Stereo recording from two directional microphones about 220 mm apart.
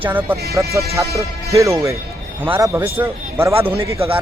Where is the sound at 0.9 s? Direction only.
25° right (ahead or behind).